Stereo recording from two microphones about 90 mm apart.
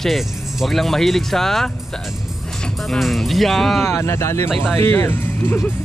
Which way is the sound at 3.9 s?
30° left (ahead or behind).